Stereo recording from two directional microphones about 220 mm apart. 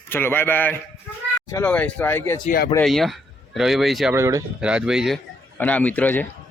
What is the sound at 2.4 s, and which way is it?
Speech, 40° left (ahead or behind).